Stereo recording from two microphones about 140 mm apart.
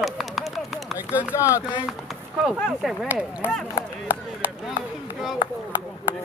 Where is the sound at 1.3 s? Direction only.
20° left (ahead or behind).